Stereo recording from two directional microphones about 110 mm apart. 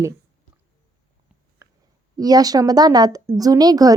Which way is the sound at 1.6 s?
25° right (ahead or behind).